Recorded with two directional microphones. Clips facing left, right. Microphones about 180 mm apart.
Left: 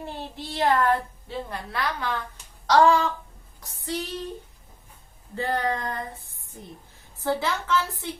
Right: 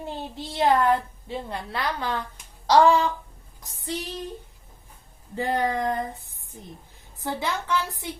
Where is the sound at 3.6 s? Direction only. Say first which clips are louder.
Left 1 dB; 15° right (ahead or behind).